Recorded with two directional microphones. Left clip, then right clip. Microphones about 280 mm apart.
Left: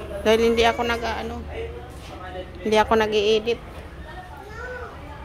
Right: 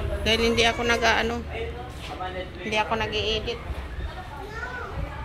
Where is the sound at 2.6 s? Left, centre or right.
Left.